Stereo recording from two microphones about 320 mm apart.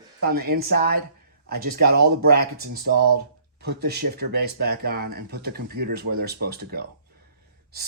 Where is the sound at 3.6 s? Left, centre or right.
Right.